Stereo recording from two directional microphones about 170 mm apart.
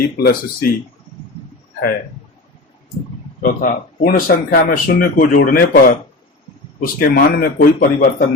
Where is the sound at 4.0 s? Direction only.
55° left (ahead or behind).